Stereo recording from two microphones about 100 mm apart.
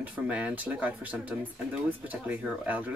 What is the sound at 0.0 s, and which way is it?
Speech, 15° right (ahead or behind).